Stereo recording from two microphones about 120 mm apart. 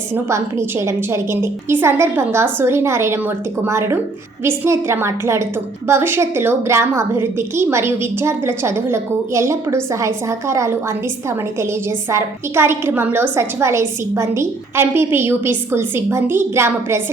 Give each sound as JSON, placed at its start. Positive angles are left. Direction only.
{"t": 0.1, "sound": "a woman's voice", "side_deg": -25}